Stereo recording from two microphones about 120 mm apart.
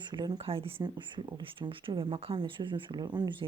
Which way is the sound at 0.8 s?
40° right (ahead or behind).